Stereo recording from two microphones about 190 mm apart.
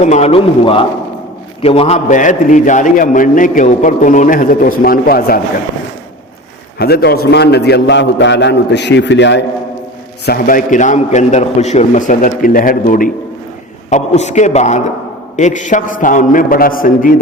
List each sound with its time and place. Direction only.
0.0 s a man's voice: 35° left (ahead or behind); by 5.4 s 50° left (ahead or behind)
6.7 s a man's voice: 60° left (ahead or behind)
10.2 s a man's voice: 50° left (ahead or behind)